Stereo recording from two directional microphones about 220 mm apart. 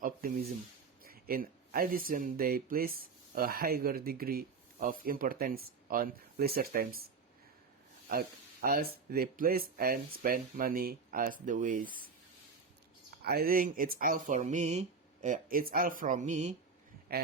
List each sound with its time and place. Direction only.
0.0 s a sound: 40° right (ahead or behind)
1.0 s speech: 40° right (ahead or behind)
8.6 s speech: 40° right (ahead or behind)
13.2 s speech: 45° right (ahead or behind)